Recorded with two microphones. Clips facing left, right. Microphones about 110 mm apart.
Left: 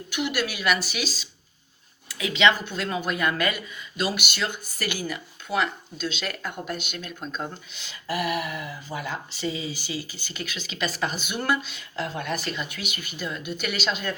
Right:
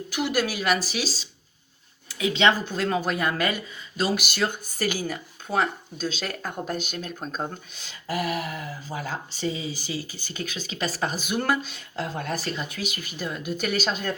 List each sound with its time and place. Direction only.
0.3 s speech: 35° right (ahead or behind)